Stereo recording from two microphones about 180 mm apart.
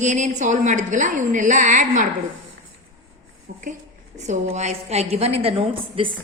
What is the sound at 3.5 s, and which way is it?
A woman's voice, 45° right (ahead or behind).